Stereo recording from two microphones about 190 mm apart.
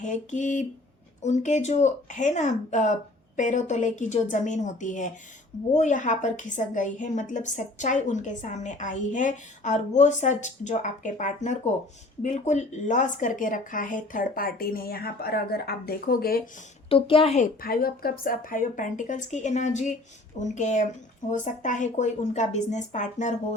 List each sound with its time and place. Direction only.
0.0 s a woman's voice: 40° left (ahead or behind)
16.9 s a woman's voice: 30° left (ahead or behind)